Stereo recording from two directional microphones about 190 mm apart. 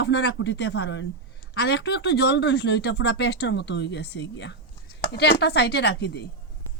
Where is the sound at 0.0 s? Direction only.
65° left (ahead or behind).